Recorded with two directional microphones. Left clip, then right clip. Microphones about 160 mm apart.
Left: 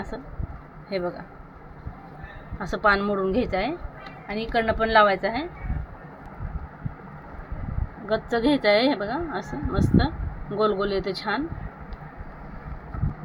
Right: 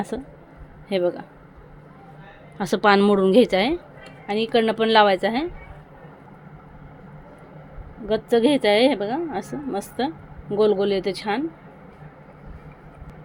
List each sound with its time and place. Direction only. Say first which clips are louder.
0.1 s a woman's voice: right 5 dB; 65° right (ahead or behind)
2.6 s a woman's voice: right 4 dB; 90° right
4.3 s a woman's voice: right 4 dB; 65° right (ahead or behind); by 5.5 s 85° right
8.0 s speech: right 4 dB; 45° right (ahead or behind)